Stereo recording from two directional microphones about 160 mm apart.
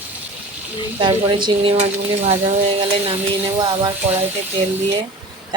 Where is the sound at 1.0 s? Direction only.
30° right (ahead or behind).